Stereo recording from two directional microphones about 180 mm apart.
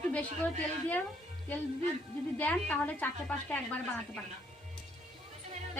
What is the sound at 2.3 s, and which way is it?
A woman's voice, 10° left (ahead or behind).